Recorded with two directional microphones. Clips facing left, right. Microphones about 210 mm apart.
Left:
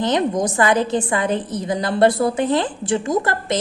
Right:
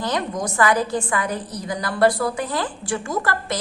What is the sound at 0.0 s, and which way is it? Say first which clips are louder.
A woman's voice: left 6 dB; 20° left (ahead or behind).